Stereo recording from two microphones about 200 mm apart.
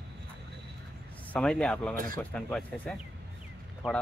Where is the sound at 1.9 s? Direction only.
45° right (ahead or behind).